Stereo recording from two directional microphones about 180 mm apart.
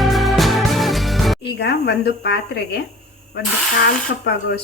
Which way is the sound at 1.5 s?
70° left (ahead or behind).